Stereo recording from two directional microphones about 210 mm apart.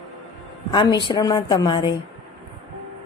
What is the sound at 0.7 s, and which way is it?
A woman's voice, 20° left (ahead or behind).